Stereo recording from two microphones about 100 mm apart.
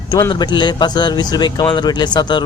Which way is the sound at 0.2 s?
40° left (ahead or behind).